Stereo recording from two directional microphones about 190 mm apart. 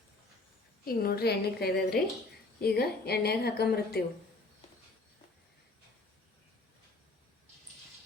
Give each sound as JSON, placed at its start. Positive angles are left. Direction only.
{"t": 0.9, "sound": "a woman's voice", "side_deg": 50}